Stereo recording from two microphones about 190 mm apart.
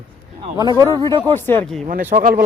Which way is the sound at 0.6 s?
20° right (ahead or behind).